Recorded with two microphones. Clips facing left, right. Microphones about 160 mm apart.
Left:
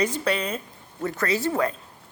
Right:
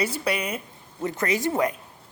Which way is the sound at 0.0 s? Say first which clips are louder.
Left 2 dB; 10° right (ahead or behind).